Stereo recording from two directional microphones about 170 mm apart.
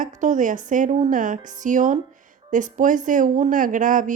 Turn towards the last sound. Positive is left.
turn(degrees=-50)  # may be behind; listen again after turning